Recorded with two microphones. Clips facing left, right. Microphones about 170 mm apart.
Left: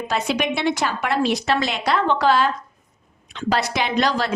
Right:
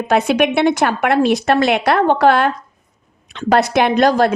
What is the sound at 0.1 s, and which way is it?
A woman's voice, 55° right (ahead or behind).